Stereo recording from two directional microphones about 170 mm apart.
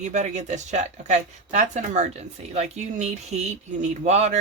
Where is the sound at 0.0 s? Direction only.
45° right (ahead or behind).